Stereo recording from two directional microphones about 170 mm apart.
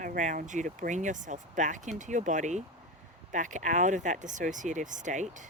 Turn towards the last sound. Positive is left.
turn(degrees=-45)  # may be behind; listen again after turning